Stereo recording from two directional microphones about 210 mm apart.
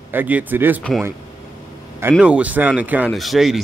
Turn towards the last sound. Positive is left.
turn(degrees=0)  # may be behind; listen again after turning